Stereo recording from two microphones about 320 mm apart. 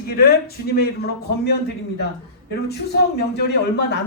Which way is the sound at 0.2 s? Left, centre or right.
Left.